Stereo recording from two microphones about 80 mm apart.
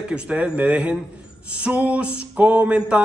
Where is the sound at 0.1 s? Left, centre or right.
Centre.